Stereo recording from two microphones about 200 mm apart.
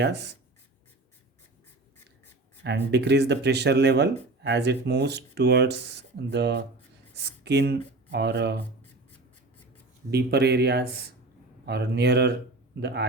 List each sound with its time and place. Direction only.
0.0 s speech: 60° right (ahead or behind)
2.6 s speech: 60° right (ahead or behind)
10.1 s speech: 55° right (ahead or behind)